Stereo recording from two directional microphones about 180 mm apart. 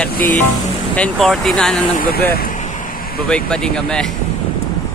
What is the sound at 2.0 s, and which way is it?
Speech, 60° left (ahead or behind).